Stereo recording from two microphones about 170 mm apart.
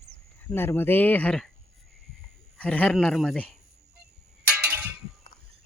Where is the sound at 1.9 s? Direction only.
Centre (ahead or behind).